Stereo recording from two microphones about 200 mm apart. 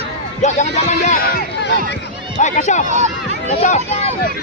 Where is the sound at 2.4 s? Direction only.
35° left (ahead or behind).